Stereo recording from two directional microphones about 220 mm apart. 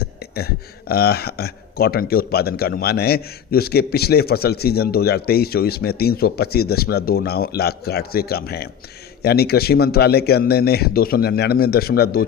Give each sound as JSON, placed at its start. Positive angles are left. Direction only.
{"t": 0.3, "sound": "speech", "side_deg": 45}